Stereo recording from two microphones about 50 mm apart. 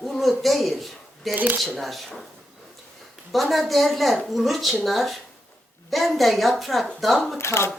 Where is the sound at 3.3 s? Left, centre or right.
Centre.